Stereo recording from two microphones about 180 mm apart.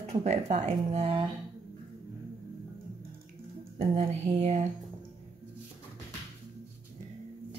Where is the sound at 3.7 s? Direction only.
35° right (ahead or behind).